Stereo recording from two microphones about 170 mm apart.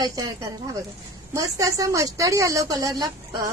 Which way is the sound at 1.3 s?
20° right (ahead or behind).